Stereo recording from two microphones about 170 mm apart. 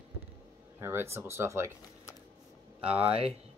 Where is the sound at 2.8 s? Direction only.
5° right (ahead or behind).